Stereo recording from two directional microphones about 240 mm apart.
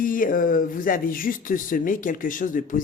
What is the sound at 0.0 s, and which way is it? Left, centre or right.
Speech, left.